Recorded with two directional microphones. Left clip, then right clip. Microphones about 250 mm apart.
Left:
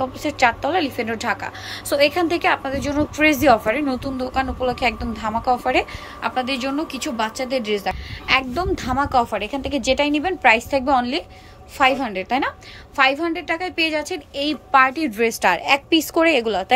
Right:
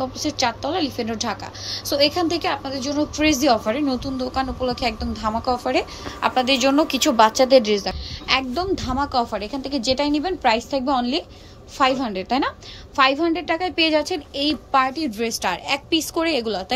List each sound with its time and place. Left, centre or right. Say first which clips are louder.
0.0 s a woman's voice: left 4 dB; centre